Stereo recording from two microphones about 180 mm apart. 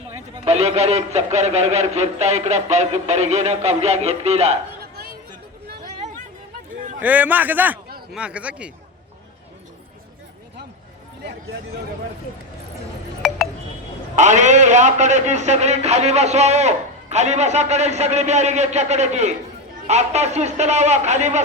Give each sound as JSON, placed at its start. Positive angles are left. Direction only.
{"t": 0.4, "sound": "a man's voice", "side_deg": -35}
{"t": 7.0, "sound": "a man's voice", "side_deg": -10}
{"t": 14.2, "sound": "a man's voice", "side_deg": -40}